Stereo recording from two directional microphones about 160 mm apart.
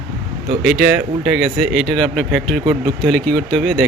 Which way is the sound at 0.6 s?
5° right (ahead or behind).